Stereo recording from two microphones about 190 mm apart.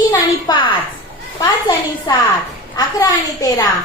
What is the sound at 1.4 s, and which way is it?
A woman's voice, 20° left (ahead or behind).